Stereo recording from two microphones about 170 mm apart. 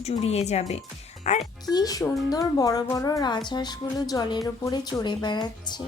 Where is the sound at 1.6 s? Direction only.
20° left (ahead or behind).